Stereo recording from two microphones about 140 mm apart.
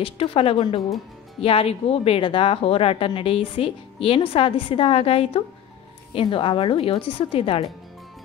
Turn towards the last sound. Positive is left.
turn(degrees=40)  # may be behind; listen again after turning